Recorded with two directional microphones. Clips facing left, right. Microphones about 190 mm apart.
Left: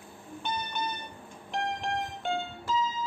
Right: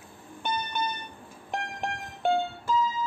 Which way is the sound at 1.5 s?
55° right (ahead or behind).